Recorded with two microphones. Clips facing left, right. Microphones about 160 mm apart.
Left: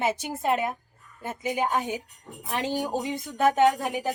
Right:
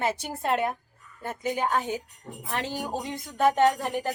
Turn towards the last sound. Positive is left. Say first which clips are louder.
# left 1 dB
turn(degrees=5)  # may be behind; listen again after turning